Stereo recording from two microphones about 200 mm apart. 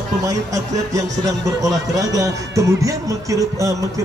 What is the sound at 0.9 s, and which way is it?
Speech, 15° right (ahead or behind).